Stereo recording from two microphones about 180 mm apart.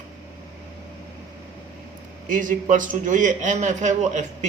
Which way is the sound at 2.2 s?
45° right (ahead or behind).